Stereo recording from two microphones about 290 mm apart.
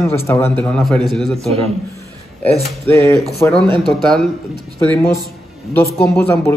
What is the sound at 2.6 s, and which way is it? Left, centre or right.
A man's voice, centre.